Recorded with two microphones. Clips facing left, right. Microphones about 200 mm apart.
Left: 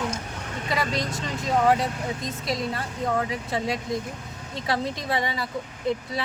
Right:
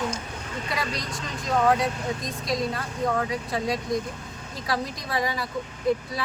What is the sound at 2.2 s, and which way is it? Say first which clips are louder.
A woman's voice: right 1 dB; 25° left (ahead or behind).